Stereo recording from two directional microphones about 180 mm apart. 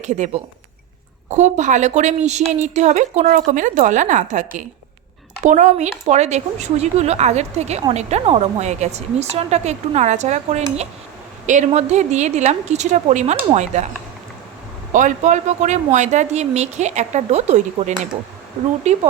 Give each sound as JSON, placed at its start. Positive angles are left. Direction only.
{"t": 0.0, "sound": "a woman's voice", "side_deg": -40}
{"t": 1.3, "sound": "a woman's voice", "side_deg": -40}
{"t": 14.9, "sound": "a woman's voice", "side_deg": -45}